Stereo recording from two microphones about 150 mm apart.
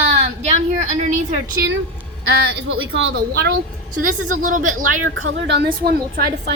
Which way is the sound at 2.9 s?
90° right.